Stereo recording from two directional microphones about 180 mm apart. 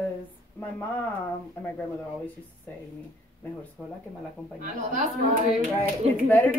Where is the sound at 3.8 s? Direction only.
5° left (ahead or behind).